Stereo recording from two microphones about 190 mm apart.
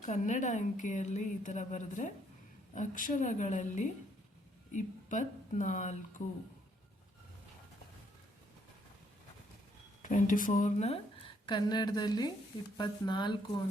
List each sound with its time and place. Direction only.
0.0 s a woman's voice: 40° left (ahead or behind)
10.0 s a woman's voice: 40° left (ahead or behind); by 13.3 s 25° left (ahead or behind)